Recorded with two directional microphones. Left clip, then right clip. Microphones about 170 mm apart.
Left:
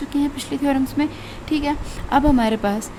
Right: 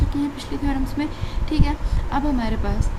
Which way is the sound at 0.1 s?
50° left (ahead or behind).